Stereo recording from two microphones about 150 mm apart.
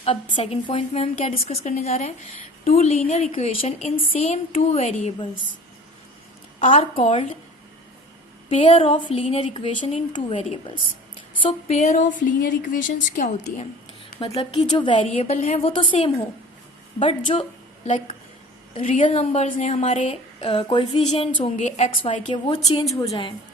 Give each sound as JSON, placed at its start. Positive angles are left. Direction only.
{"t": 0.3, "sound": "a woman's voice", "side_deg": 40}
{"t": 6.6, "sound": "a woman's voice", "side_deg": 35}
{"t": 8.4, "sound": "a woman's voice", "side_deg": 35}
{"t": 10.3, "sound": "a woman's voice", "side_deg": 40}
{"t": 14.2, "sound": "a woman's voice", "side_deg": 35}
{"t": 15.7, "sound": "a woman's voice", "side_deg": 30}
{"t": 19.0, "sound": "a woman's voice", "side_deg": 40}
{"t": 19.5, "sound": "a woman's voice", "side_deg": 60}
{"t": 22.3, "sound": "a woman's voice", "side_deg": 35}